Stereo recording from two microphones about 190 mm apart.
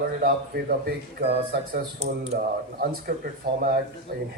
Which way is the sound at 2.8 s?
50° right (ahead or behind).